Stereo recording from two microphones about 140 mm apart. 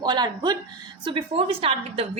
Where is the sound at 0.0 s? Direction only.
30° right (ahead or behind).